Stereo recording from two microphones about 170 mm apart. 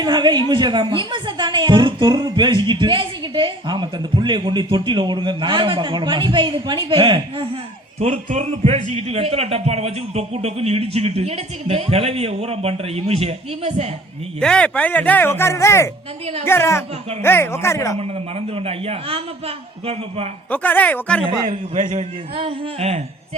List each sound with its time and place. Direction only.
0.0 s a woman's voice: 25° right (ahead or behind)
14.3 s speech: 5° left (ahead or behind)
18.0 s a man's voice: 35° right (ahead or behind)
20.5 s speech: 10° left (ahead or behind)
21.2 s a woman's voice: 30° right (ahead or behind)
21.8 s a man's voice: 40° right (ahead or behind)